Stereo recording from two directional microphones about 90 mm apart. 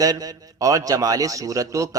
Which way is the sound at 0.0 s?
45° right (ahead or behind).